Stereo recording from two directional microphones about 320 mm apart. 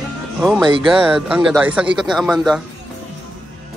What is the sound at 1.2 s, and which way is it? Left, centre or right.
Speech, centre.